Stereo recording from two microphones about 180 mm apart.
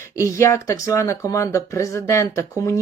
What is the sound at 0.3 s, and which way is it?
Speech, 15° left (ahead or behind).